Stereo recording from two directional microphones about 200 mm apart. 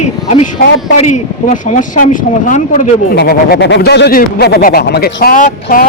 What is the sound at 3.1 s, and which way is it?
Speech, 50° left (ahead or behind).